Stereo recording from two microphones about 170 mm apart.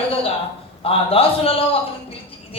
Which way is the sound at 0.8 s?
35° left (ahead or behind).